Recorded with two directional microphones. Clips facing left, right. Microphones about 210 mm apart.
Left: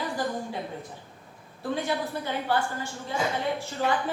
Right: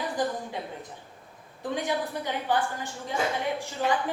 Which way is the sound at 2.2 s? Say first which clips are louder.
Even; 15° right (ahead or behind).